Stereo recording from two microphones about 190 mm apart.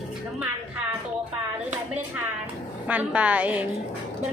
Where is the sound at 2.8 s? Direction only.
10° right (ahead or behind).